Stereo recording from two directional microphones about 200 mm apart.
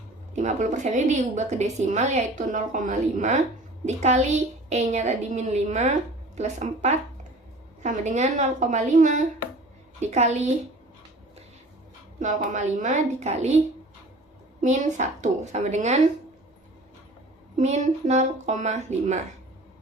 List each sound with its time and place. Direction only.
0.3 s a woman's voice: 35° right (ahead or behind)
12.2 s a woman's voice: 40° right (ahead or behind)
14.6 s a woman's voice: 40° right (ahead or behind)
17.6 s a woman's voice: 35° right (ahead or behind)